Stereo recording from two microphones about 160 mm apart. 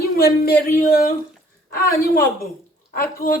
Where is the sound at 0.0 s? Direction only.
70° left (ahead or behind).